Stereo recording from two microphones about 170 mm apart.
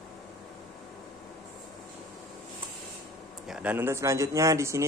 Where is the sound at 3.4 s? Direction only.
5° right (ahead or behind).